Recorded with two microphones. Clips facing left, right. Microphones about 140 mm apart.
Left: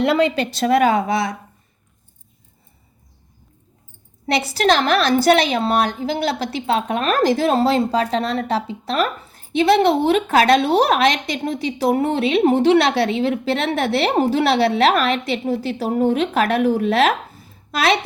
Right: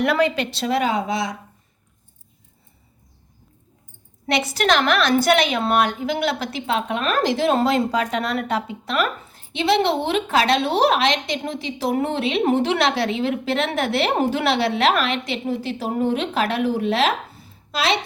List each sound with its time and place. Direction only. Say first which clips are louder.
0.0 s a woman's voice: left 2 dB; 25° left (ahead or behind)
0.5 s speech: left 5 dB; 50° left (ahead or behind)
4.3 s a woman's voice: left 2 dB; 35° left (ahead or behind); by 17.9 s 50° left (ahead or behind)